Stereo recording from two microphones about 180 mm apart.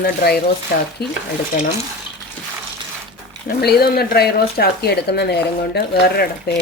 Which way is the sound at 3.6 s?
60° left (ahead or behind).